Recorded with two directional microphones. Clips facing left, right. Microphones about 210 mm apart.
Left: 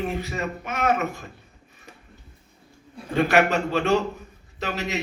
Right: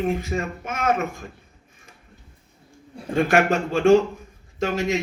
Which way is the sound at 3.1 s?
45° right (ahead or behind).